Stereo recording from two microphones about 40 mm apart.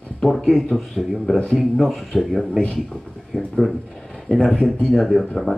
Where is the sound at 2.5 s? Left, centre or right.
Left.